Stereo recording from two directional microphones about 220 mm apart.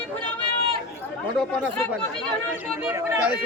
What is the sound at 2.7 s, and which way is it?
Speech, 10° right (ahead or behind).